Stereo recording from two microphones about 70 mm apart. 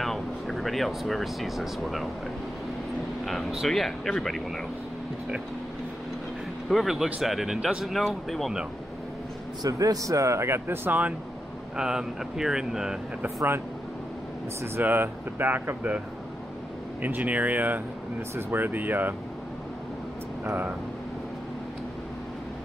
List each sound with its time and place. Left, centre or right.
0.0 s speech: centre
3.6 s speech: centre
6.7 s speech: centre
9.6 s speech: right
11.7 s speech: centre
14.8 s speech: right
17.0 s speech: right